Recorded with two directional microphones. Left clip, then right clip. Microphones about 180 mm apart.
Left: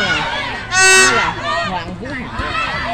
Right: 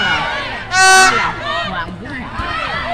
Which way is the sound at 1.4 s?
20° left (ahead or behind).